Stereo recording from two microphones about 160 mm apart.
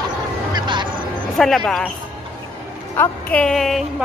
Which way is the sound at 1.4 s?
Centre (ahead or behind).